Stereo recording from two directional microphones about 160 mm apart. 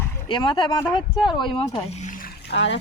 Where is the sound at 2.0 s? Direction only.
60° left (ahead or behind); by 2.8 s 80° left.